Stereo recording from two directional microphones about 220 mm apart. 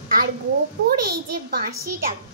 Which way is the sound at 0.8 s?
45° right (ahead or behind).